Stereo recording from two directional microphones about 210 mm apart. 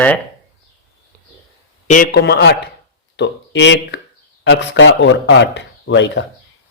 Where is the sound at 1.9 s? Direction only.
45° left (ahead or behind).